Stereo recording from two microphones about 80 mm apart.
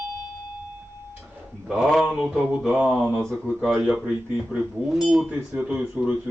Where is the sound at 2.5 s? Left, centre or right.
Right.